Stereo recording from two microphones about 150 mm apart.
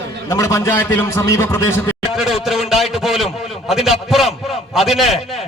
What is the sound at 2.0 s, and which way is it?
A man's voice, 5° right (ahead or behind).